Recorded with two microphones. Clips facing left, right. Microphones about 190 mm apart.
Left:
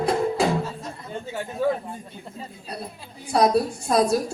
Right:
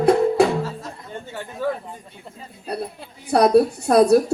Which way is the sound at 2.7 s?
60° right (ahead or behind).